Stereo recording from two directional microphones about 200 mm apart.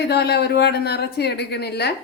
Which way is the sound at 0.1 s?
55° left (ahead or behind).